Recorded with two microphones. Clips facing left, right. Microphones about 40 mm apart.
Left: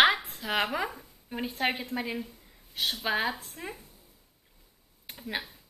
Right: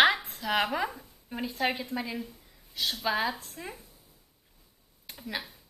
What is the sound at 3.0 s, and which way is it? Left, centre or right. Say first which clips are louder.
Speech: right 1 dB; left.